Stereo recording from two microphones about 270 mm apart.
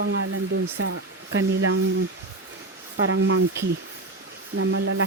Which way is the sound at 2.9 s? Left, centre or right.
Right.